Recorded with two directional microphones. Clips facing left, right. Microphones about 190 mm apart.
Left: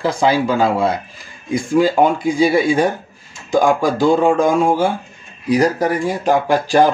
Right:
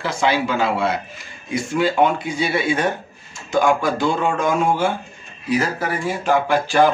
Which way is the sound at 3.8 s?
35° left (ahead or behind).